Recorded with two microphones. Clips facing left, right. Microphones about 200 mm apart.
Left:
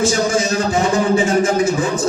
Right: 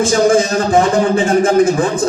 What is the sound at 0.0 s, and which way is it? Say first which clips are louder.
A man's voice: right 5 dB; 55° right (ahead or behind).